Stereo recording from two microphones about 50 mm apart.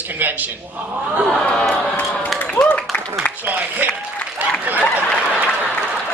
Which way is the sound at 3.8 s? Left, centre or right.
Right.